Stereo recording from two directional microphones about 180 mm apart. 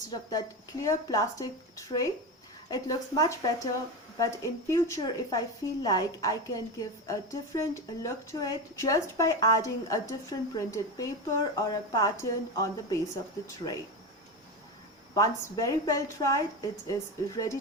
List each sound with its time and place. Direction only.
0.1 s a woman's voice: 20° left (ahead or behind)
15.1 s a woman's voice: 20° left (ahead or behind)